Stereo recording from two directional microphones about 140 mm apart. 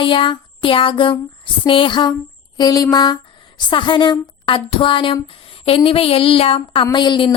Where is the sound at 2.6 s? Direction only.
25° left (ahead or behind).